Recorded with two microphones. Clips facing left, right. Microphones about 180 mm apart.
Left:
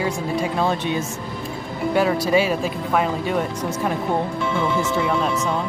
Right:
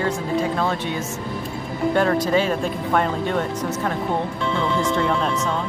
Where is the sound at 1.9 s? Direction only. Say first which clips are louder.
Left 1 dB; 10° left (ahead or behind).